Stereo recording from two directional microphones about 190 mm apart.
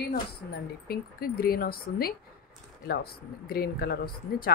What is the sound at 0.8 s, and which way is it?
Speech, 55° left (ahead or behind).